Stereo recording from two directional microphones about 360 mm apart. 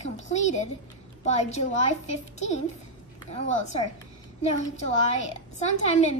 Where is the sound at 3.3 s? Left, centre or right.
Centre.